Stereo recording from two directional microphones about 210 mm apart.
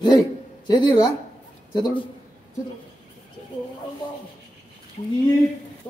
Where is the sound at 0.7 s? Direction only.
20° left (ahead or behind).